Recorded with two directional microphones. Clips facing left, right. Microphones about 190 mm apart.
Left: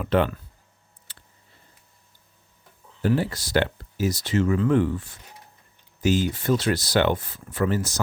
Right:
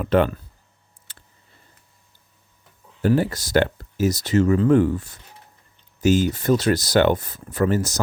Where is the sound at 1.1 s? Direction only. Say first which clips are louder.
Right 2 dB; 45° right (ahead or behind).